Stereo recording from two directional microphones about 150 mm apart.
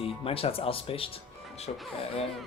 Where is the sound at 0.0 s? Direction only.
40° left (ahead or behind).